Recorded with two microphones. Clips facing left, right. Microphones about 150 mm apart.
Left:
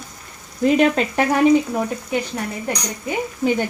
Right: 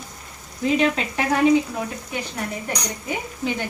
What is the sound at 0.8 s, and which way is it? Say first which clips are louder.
Speech: left 5 dB; 45° left (ahead or behind).